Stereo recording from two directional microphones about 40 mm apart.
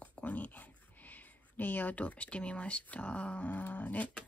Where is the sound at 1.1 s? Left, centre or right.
Left.